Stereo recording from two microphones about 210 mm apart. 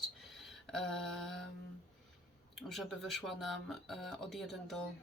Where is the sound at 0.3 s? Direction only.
Centre (ahead or behind).